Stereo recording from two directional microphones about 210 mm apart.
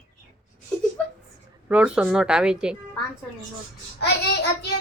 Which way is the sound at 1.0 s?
5° left (ahead or behind).